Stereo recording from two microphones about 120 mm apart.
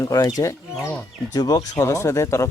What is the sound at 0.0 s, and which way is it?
Speech, 30° left (ahead or behind).